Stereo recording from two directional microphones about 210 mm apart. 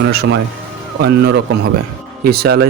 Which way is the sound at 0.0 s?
50° right (ahead or behind).